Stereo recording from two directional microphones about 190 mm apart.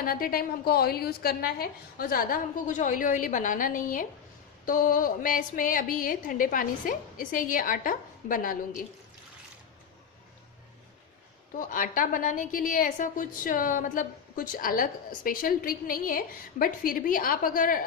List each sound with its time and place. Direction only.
0.0 s a woman's voice: 50° left (ahead or behind)
11.5 s a woman's voice: 45° left (ahead or behind)